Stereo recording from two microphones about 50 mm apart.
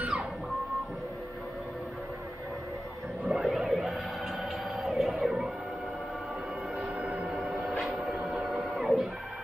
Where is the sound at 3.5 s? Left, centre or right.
Centre.